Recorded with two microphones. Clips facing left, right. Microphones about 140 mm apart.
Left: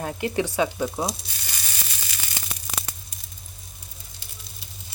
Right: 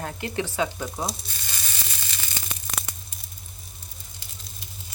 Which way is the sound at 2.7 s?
5° left (ahead or behind).